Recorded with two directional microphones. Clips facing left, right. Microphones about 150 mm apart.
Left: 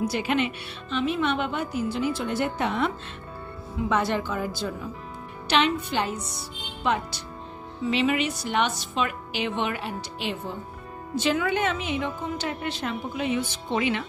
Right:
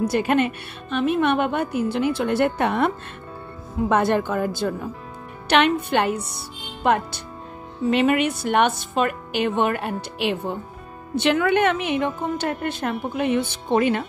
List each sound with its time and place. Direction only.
0.0 s a woman's voice: 50° right (ahead or behind)
3.9 s a woman's voice: 50° right (ahead or behind)